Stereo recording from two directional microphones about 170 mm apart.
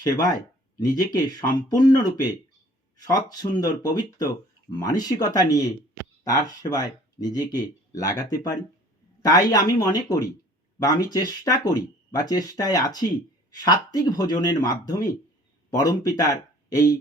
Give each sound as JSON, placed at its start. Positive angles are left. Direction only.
{"t": 0.0, "sound": "speech", "side_deg": 20}